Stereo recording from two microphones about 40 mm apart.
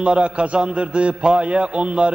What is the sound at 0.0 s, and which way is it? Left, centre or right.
A man's voice, right.